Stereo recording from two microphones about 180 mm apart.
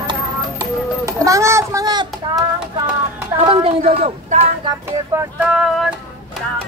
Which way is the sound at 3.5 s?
30° right (ahead or behind).